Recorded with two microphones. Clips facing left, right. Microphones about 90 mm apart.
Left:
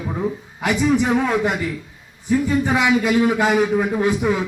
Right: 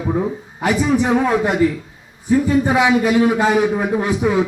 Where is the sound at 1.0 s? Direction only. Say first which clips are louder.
Right 2 dB; 20° right (ahead or behind).